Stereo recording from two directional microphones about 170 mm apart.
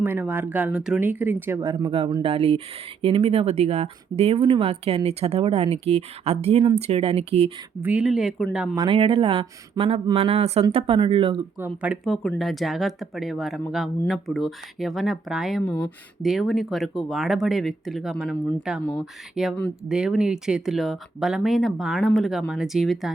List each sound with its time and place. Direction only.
0.0 s speech: 10° right (ahead or behind)
1.9 s speech: 30° right (ahead or behind)
7.8 s speech: 10° right (ahead or behind)
8.7 s speech: 30° right (ahead or behind)
11.6 s speech: 10° right (ahead or behind)